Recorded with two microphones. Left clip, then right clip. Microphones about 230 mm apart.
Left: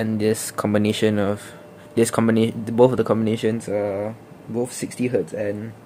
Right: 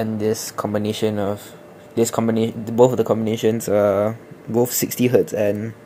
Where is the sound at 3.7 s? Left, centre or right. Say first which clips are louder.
Right 7 dB; centre.